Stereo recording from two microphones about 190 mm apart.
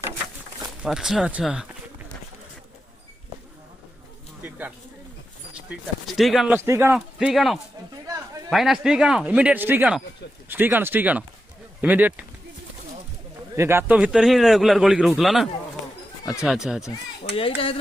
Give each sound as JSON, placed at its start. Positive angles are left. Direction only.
{"t": 0.8, "sound": "a man's voice", "side_deg": 0}
{"t": 4.4, "sound": "a sound", "side_deg": -10}
{"t": 6.1, "sound": "a man's voice", "side_deg": 0}
{"t": 13.6, "sound": "a man's voice", "side_deg": -10}
{"t": 17.3, "sound": "speech", "side_deg": 30}